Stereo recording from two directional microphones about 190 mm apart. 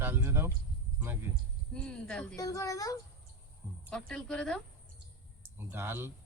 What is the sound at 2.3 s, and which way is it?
Speech, 15° left (ahead or behind).